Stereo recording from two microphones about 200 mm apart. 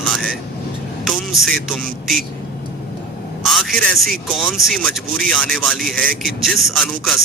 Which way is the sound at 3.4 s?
Centre (ahead or behind).